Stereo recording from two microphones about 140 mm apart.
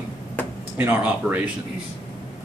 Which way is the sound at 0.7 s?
10° right (ahead or behind).